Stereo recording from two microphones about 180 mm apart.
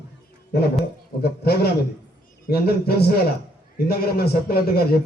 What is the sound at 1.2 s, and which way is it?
A man's voice, 65° left (ahead or behind).